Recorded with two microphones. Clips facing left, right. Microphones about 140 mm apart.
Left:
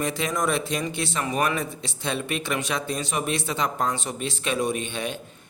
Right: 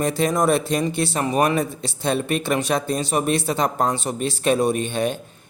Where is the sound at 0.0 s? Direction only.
40° right (ahead or behind).